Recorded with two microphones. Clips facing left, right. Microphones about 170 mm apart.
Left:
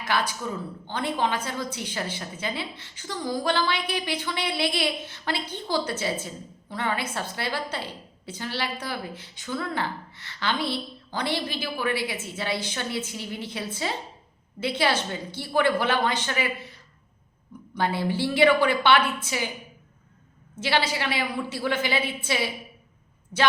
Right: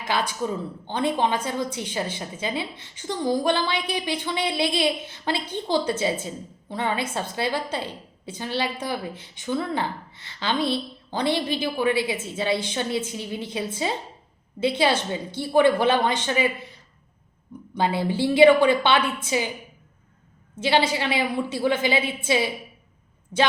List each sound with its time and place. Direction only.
0.1 s a woman's voice: 20° right (ahead or behind)
17.7 s a woman's voice: 20° right (ahead or behind)
20.6 s a woman's voice: 20° right (ahead or behind)